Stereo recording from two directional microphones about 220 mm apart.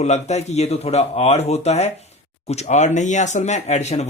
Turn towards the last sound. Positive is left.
turn(degrees=30)  # may be behind; listen again after turning